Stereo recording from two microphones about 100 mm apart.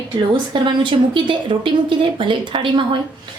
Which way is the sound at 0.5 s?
55° right (ahead or behind).